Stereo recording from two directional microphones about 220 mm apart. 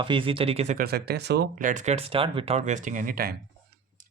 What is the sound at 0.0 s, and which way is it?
Speech, 25° right (ahead or behind).